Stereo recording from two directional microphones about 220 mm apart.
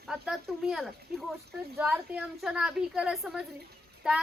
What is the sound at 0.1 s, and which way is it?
A woman's voice, centre (ahead or behind).